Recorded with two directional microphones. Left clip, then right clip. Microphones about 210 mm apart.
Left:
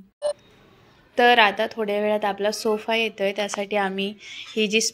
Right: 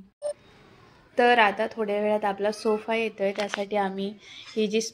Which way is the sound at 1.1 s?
Centre (ahead or behind).